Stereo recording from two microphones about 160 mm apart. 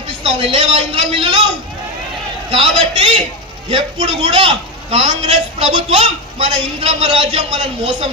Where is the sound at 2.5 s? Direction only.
35° right (ahead or behind).